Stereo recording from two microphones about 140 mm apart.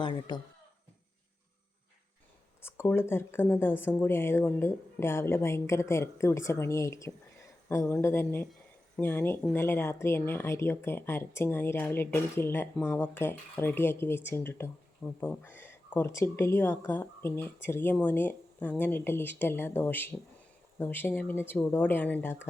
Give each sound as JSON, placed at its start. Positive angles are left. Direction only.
{"t": 0.0, "sound": "speech", "side_deg": 30}
{"t": 2.6, "sound": "speech", "side_deg": 20}